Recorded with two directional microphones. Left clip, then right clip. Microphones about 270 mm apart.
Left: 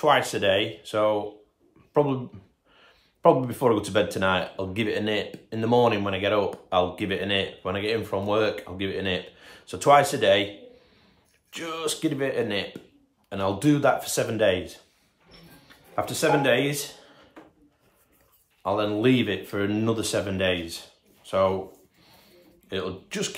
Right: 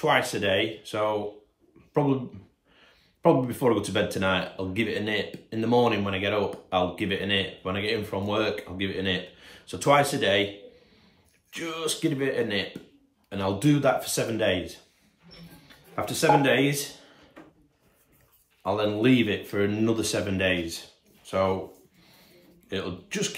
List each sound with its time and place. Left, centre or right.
0.0 s speech: centre
2.8 s speech: centre
11.5 s speech: centre
15.7 s a sound: centre
18.6 s speech: centre
22.7 s speech: centre